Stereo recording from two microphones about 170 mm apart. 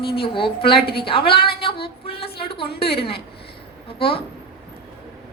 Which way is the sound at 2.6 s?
70° left (ahead or behind).